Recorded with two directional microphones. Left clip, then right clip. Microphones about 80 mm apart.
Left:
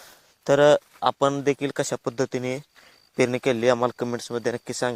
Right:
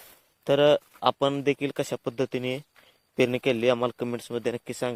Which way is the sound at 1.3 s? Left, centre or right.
Centre.